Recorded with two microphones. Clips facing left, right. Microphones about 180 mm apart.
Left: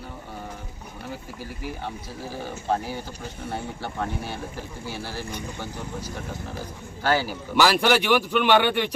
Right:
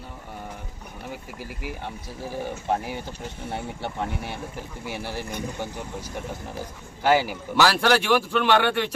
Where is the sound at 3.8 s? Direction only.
20° right (ahead or behind).